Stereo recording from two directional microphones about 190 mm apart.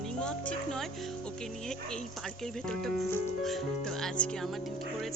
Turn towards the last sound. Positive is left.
turn(degrees=5)  # may be behind; listen again after turning